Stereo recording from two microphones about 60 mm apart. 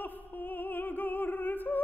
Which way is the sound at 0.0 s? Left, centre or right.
Left.